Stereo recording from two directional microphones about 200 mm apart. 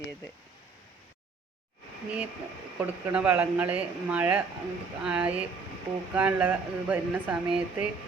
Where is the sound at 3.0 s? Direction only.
10° right (ahead or behind).